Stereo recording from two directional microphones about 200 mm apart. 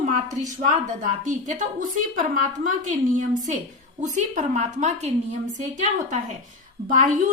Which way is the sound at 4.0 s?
35° right (ahead or behind).